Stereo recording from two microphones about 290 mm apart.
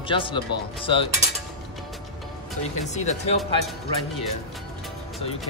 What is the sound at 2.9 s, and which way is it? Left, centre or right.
Speech, left.